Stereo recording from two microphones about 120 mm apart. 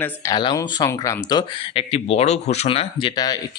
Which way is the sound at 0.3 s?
35° left (ahead or behind).